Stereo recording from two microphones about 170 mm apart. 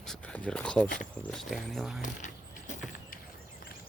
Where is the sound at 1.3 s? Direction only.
Centre (ahead or behind).